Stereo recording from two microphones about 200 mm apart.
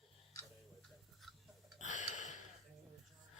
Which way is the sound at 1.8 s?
40° left (ahead or behind).